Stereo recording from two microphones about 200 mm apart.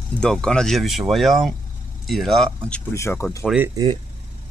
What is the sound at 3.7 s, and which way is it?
Speech, 20° right (ahead or behind).